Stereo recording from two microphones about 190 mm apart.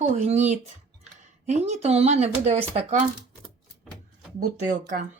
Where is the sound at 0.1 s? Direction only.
40° right (ahead or behind).